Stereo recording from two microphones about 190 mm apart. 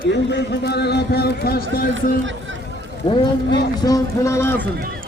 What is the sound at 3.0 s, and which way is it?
A man's voice, 25° left (ahead or behind).